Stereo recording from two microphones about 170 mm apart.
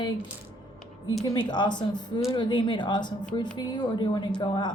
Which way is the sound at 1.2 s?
25° left (ahead or behind).